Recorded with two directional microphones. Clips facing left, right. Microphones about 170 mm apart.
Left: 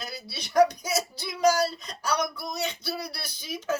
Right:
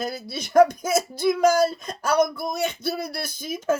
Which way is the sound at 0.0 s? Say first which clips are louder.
Right 9 dB; 50° right (ahead or behind).